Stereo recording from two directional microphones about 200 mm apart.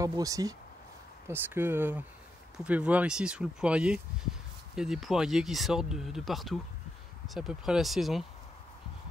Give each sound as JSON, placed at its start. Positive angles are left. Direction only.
{"t": 0.0, "sound": "speech", "side_deg": -15}